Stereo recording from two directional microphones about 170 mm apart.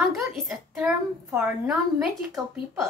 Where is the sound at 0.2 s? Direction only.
Centre (ahead or behind).